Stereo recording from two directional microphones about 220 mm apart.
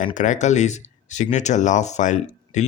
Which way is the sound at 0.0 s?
35° left (ahead or behind).